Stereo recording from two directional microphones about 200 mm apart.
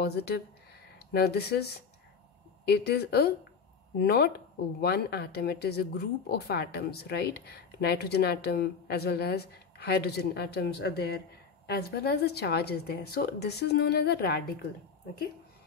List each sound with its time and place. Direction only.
0.0 s speech: 55° left (ahead or behind)